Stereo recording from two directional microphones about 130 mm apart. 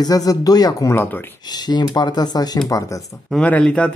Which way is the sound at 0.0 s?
30° left (ahead or behind).